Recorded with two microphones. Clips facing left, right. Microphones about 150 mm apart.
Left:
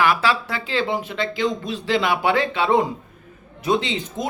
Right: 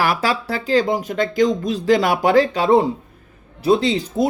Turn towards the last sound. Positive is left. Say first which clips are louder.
# right 7 dB
turn(degrees=-35)  # may be behind; listen again after turning